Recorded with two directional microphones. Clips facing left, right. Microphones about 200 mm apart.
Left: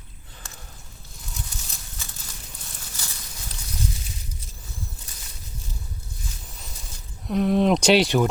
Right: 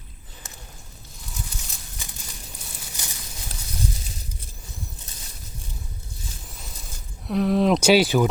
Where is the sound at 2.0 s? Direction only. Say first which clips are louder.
Right 2 dB; 15° right (ahead or behind).